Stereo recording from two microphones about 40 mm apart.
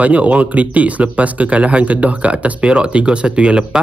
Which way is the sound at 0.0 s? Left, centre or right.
Right.